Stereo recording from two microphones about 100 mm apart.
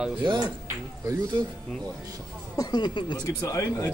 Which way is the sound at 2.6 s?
45° left (ahead or behind).